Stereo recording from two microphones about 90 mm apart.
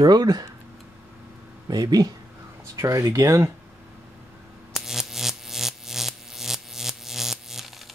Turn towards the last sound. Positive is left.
turn(degrees=-5)  # may be behind; listen again after turning